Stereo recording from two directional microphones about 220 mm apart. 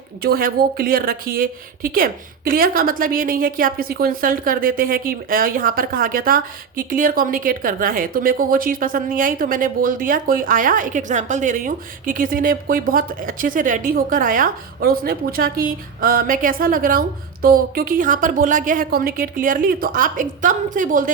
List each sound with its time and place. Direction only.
0.2 s speech: 45° right (ahead or behind)